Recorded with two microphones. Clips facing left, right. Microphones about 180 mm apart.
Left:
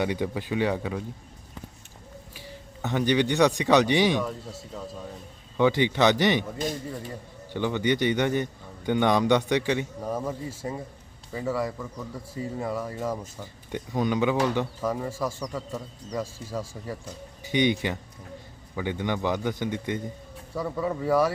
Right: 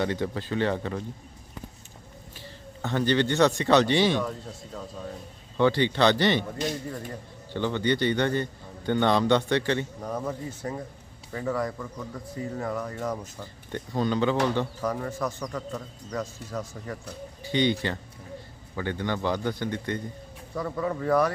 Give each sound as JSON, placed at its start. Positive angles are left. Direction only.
{"t": 0.0, "sound": "a man's voice", "side_deg": 15}
{"t": 2.3, "sound": "speech", "side_deg": 10}
{"t": 4.2, "sound": "speech", "side_deg": 5}
{"t": 5.5, "sound": "a man's voice", "side_deg": 15}
{"t": 7.5, "sound": "a man's voice", "side_deg": 15}